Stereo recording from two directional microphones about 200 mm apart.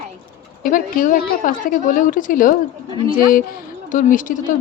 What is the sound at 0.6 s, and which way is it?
A woman's voice, 45° left (ahead or behind).